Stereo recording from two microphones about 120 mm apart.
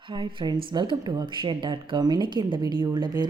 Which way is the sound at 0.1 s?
40° right (ahead or behind).